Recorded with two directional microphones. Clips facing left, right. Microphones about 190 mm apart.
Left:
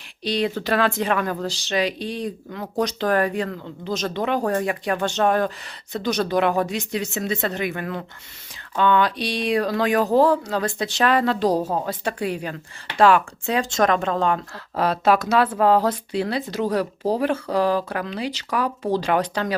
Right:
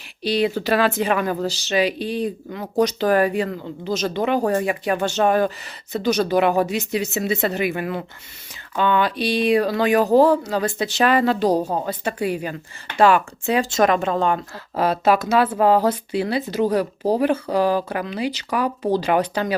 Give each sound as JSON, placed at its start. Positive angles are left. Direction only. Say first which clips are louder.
{"t": 0.2, "sound": "speech", "louder": "right 3 dB", "side_deg": -5}